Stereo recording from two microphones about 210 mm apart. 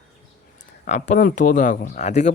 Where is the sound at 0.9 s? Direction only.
35° left (ahead or behind).